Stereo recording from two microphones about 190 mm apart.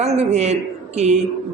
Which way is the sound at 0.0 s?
35° right (ahead or behind).